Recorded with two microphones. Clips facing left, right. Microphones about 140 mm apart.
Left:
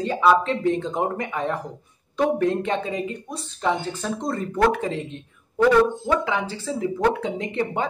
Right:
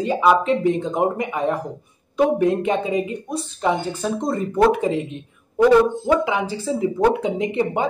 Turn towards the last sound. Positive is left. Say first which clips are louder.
# right 4 dB
turn(degrees=-15)  # may be behind; listen again after turning